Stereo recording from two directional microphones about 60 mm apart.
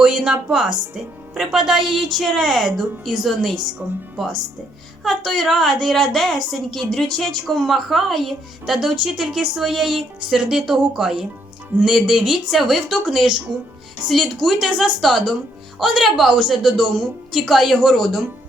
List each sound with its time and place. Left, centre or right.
0.0 s a woman's voice: centre
3.8 s speech: right
5.0 s a woman's voice: centre